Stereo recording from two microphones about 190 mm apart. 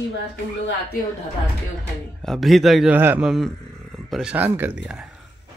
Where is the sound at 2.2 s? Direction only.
Centre (ahead or behind).